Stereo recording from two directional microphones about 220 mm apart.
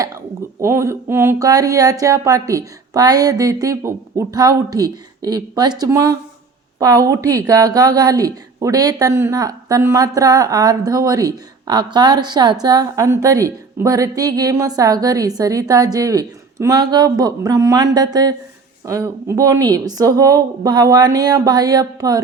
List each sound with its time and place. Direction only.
0.6 s speech: 15° right (ahead or behind)